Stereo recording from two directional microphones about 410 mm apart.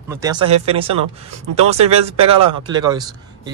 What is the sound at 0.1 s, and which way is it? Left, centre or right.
Speech, centre.